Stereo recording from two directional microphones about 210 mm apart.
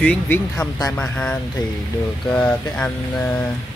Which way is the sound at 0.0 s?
10° left (ahead or behind).